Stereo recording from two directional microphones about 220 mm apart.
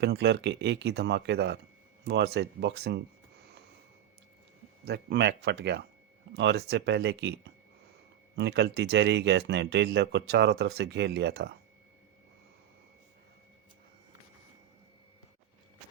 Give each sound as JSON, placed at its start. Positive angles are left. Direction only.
{"t": 0.0, "sound": "speech", "side_deg": -50}
{"t": 4.9, "sound": "speech", "side_deg": -50}